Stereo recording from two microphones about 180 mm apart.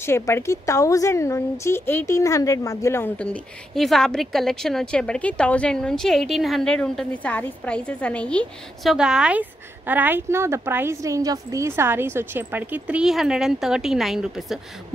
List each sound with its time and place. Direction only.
0.0 s a woman's voice: 15° left (ahead or behind)
8.9 s a woman's voice: 5° right (ahead or behind)